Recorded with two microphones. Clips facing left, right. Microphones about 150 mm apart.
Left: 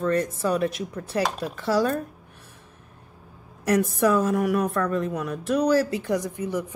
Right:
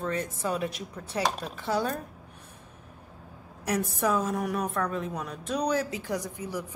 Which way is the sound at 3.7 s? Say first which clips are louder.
Left 6 dB; 75° left (ahead or behind).